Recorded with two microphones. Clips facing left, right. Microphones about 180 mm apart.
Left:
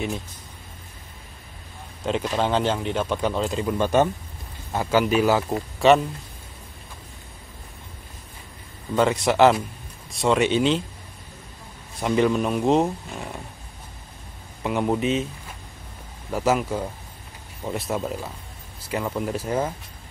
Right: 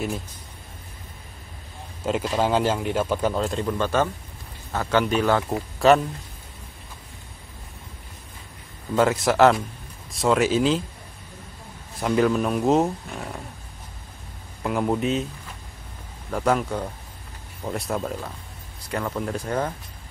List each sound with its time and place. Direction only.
2.0 s speech: 5° right (ahead or behind)
3.7 s a man's voice: 15° left (ahead or behind); by 5.9 s centre (ahead or behind)
8.9 s speech: centre (ahead or behind)
12.0 s speech: centre (ahead or behind)
14.6 s speech: centre (ahead or behind)
16.3 s a man's voice: 5° left (ahead or behind)